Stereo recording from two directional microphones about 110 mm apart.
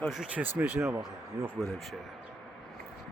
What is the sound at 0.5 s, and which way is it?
Speech, 15° right (ahead or behind).